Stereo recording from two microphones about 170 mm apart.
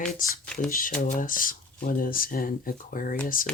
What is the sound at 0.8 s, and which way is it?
Speech, 50° left (ahead or behind).